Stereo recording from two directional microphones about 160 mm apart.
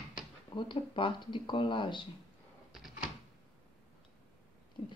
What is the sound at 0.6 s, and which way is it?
Speech, 30° left (ahead or behind).